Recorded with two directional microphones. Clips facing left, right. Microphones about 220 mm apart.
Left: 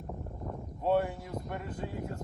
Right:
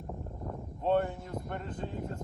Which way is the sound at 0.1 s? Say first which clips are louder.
Even; centre (ahead or behind).